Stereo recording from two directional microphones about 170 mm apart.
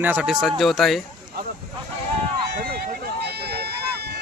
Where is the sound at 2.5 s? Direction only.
65° right (ahead or behind).